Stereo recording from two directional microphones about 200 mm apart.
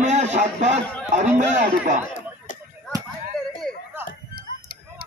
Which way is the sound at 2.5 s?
40° left (ahead or behind).